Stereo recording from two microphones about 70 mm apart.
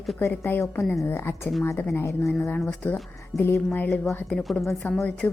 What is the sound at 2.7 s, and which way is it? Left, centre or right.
Speech, centre.